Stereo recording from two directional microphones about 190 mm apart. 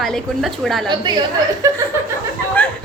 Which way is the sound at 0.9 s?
25° right (ahead or behind).